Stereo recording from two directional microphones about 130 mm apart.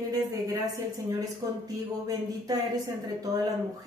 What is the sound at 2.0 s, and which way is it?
Speech, 30° right (ahead or behind).